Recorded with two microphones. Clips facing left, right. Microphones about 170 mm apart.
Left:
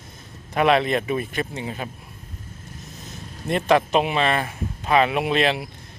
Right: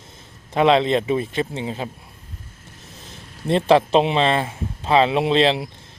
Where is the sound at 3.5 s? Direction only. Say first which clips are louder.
Right 3 dB; 30° right (ahead or behind).